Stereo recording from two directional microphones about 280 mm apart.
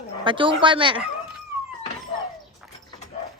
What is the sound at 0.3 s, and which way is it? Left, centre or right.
Speech, centre.